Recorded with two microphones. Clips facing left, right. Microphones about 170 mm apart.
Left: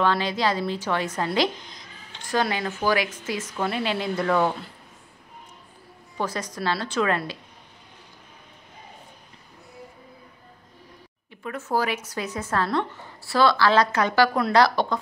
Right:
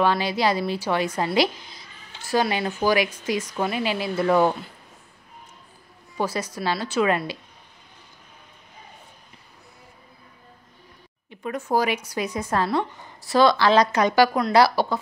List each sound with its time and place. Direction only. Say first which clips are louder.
0.0 s a woman's voice: right 2 dB; 10° right (ahead or behind)
6.1 s speech: right 2 dB; 10° right (ahead or behind)
11.2 s speech: right 4 dB; 20° right (ahead or behind)